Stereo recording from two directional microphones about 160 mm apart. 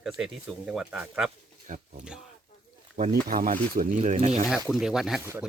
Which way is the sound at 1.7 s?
55° right (ahead or behind).